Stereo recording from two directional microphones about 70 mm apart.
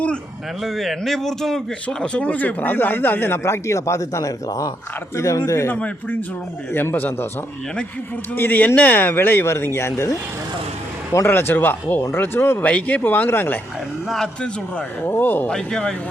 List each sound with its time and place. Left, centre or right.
0.6 s a man's voice: centre; by 5.4 s left
5.6 s a man's voice: left
8.4 s a man's voice: left
11.3 s speech: left
12.6 s a man's voice: centre
14.1 s a man's voice: centre
15.0 s speech: left
15.4 s a man's voice: centre